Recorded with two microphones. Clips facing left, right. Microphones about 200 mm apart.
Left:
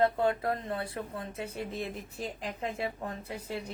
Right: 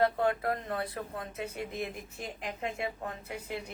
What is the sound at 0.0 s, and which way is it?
A woman's voice, 25° left (ahead or behind).